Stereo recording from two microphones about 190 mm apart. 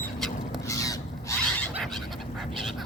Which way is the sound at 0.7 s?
15° left (ahead or behind).